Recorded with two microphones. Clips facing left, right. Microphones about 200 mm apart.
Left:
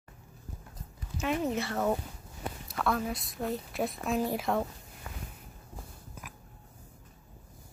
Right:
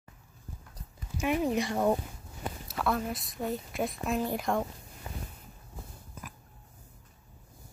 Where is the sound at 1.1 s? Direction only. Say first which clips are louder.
Right 2 dB; 15° right (ahead or behind).